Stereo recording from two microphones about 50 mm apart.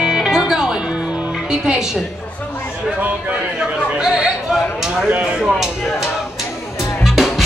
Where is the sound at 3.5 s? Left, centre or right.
Centre.